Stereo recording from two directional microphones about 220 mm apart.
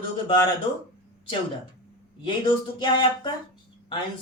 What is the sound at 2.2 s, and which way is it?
Speech, 20° left (ahead or behind).